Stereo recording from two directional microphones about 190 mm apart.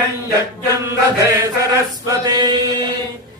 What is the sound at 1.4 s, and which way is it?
Chant, 20° right (ahead or behind).